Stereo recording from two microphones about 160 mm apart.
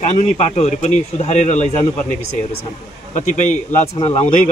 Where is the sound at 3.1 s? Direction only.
50° left (ahead or behind).